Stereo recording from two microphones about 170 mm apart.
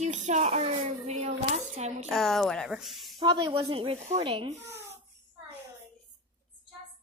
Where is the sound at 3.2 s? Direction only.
25° right (ahead or behind).